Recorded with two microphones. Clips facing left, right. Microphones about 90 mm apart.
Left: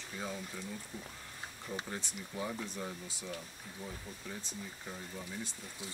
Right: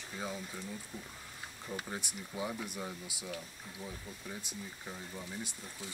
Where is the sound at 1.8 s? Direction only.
15° right (ahead or behind).